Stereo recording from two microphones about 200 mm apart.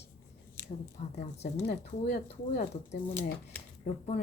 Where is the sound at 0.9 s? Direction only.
35° left (ahead or behind).